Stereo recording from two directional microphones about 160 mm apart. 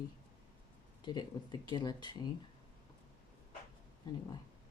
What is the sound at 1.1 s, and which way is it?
Speech, 25° left (ahead or behind).